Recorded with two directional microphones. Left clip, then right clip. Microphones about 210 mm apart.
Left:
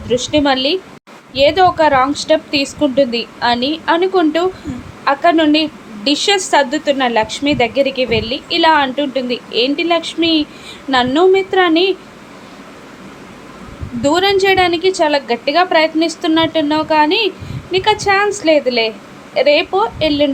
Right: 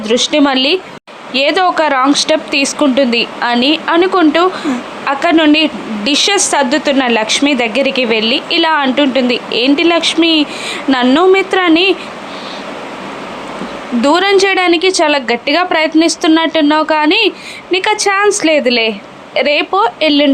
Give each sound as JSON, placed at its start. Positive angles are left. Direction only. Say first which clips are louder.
{"t": 0.0, "sound": "a woman's voice", "louder": "right 3 dB", "side_deg": -15}
{"t": 14.0, "sound": "a woman's voice", "louder": "right 3 dB", "side_deg": -20}